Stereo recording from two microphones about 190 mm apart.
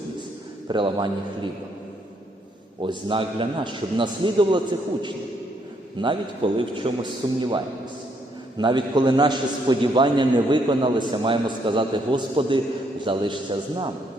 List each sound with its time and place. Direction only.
0.7 s a man's voice: 25° right (ahead or behind)
2.8 s a man's voice: 25° right (ahead or behind)
6.0 s a man's voice: 25° right (ahead or behind)